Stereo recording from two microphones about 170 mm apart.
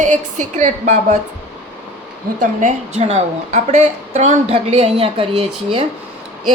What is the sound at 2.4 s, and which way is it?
A woman's voice, 45° right (ahead or behind).